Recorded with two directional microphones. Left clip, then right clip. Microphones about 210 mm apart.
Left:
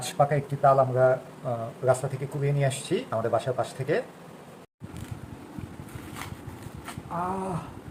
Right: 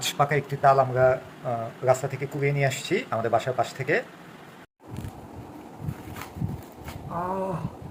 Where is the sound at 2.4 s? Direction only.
Centre (ahead or behind).